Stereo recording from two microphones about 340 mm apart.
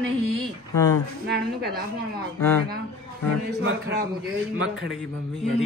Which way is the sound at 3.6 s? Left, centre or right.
Right.